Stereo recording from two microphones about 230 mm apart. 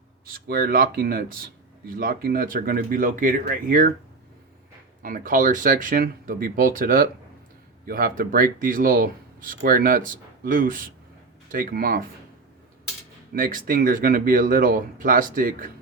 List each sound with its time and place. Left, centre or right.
0.4 s speech: right
5.0 s speech: right
13.3 s speech: right